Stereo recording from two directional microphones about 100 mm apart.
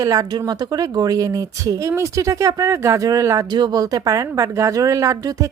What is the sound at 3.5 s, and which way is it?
A woman's voice, 45° right (ahead or behind).